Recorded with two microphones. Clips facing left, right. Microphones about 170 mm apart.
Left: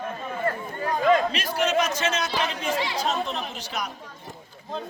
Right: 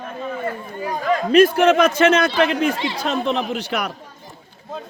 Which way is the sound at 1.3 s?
55° right (ahead or behind).